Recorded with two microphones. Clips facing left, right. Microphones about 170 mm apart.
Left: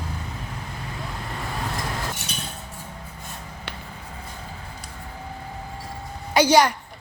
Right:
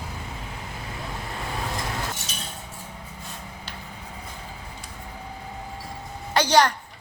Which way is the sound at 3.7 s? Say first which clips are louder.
Left 5 dB; 65° left (ahead or behind).